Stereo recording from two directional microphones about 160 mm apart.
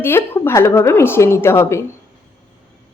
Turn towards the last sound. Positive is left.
turn(degrees=15)  # may be behind; listen again after turning